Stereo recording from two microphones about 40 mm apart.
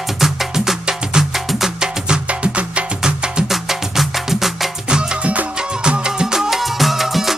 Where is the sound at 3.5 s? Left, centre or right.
Centre.